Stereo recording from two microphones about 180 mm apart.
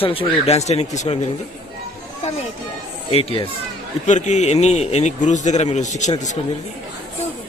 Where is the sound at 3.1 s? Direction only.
30° left (ahead or behind).